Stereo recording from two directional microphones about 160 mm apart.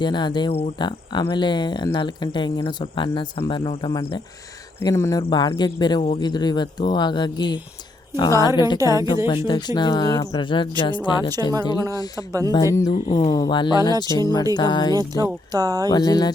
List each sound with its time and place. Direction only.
0.0 s speech: 30° left (ahead or behind)
12.5 s speech: 25° left (ahead or behind)
14.9 s speech: 25° right (ahead or behind)
15.9 s speech: 25° left (ahead or behind)